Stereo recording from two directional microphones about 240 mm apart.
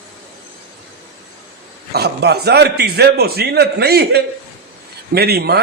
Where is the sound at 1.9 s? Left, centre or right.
Right.